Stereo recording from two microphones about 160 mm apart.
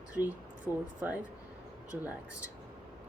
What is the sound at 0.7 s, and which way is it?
Speech, 10° right (ahead or behind).